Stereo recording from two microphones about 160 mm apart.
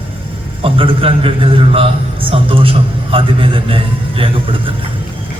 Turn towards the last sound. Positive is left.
turn(degrees=-35)  # may be behind; listen again after turning